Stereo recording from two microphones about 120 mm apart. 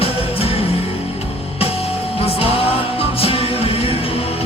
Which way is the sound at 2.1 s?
55° left (ahead or behind).